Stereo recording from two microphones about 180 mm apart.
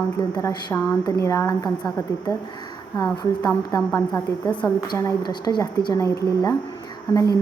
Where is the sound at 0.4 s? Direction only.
15° left (ahead or behind).